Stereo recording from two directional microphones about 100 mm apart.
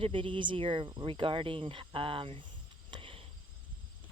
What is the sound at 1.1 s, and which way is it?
Speech, 55° right (ahead or behind).